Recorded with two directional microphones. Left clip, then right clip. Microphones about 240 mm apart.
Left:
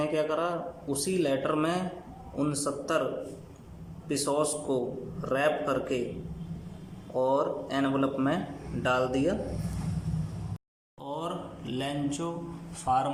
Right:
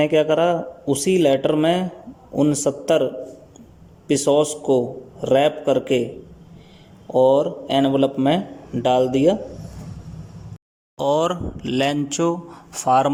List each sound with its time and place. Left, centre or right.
0.0 s a man's voice: right
4.1 s a man's voice: right
7.1 s a man's voice: right
10.9 s speech: right